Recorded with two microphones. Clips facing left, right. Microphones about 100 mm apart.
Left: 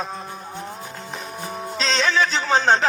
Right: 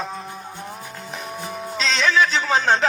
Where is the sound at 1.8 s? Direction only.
35° left (ahead or behind).